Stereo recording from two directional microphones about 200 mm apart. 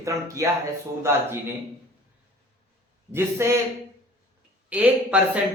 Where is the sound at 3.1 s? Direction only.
15° right (ahead or behind).